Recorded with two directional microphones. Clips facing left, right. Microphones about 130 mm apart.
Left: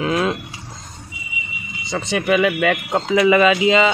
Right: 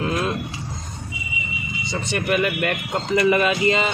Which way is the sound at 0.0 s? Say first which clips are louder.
Left 4 dB; 90° left.